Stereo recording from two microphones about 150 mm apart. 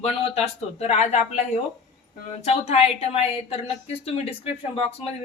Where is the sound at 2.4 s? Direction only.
45° left (ahead or behind).